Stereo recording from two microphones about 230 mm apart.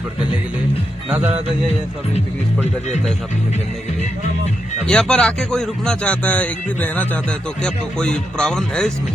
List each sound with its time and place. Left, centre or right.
1.1 s speech: centre
4.9 s speech: centre